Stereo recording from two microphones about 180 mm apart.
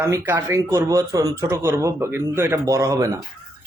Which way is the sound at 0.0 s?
15° right (ahead or behind).